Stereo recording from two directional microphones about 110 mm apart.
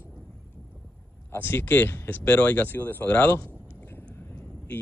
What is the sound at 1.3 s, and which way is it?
Speech, 20° left (ahead or behind).